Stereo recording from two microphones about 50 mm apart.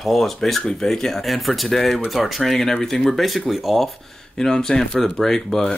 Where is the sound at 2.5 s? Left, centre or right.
Centre.